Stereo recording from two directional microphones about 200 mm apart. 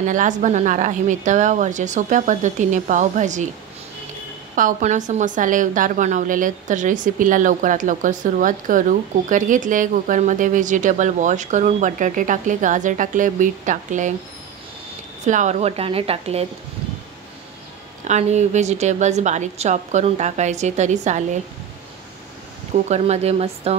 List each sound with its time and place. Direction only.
0.0 s a woman's voice: 40° right (ahead or behind)
4.6 s a woman's voice: 40° right (ahead or behind)
15.2 s a woman's voice: 35° right (ahead or behind)
18.0 s a woman's voice: 35° right (ahead or behind)
22.8 s a woman's voice: 35° right (ahead or behind)